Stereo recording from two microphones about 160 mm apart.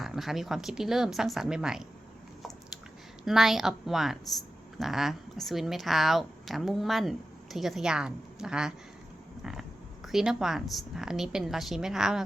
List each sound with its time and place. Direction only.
0.0 s speech: centre (ahead or behind)
3.2 s speech: centre (ahead or behind)
9.4 s a sound: 5° right (ahead or behind)
10.1 s speech: 5° right (ahead or behind)